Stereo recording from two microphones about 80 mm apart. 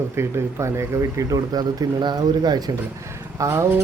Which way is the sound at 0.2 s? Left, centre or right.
Right.